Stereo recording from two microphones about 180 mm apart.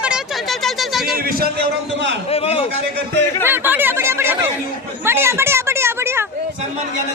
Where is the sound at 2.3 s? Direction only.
35° left (ahead or behind).